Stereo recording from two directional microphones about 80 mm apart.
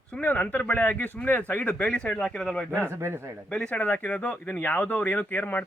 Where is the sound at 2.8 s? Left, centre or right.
Right.